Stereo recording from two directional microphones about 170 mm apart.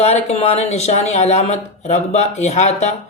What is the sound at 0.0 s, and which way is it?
Speech, 40° left (ahead or behind).